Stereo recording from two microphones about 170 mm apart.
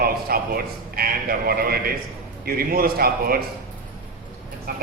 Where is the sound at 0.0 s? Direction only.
60° right (ahead or behind).